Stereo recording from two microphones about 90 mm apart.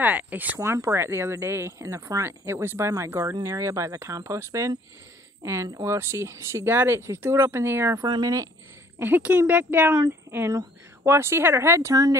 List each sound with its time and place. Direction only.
0.0 s speech: 20° right (ahead or behind)
0.6 s speech: 30° right (ahead or behind)
8.0 s speech: 45° right (ahead or behind)
8.9 s speech: 25° right (ahead or behind)
11.9 s speech: 45° right (ahead or behind)